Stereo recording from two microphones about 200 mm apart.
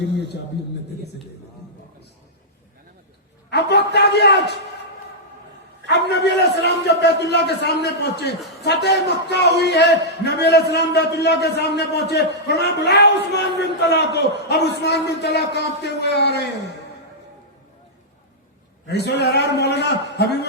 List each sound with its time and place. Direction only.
3.5 s a man's voice: 55° left (ahead or behind)
5.9 s a man's voice: 60° left (ahead or behind)
18.9 s a man's voice: 55° left (ahead or behind)